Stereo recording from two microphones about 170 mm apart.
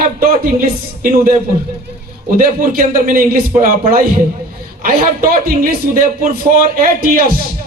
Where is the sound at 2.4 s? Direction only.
55° right (ahead or behind).